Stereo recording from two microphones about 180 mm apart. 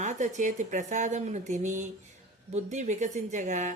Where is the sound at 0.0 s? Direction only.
45° right (ahead or behind).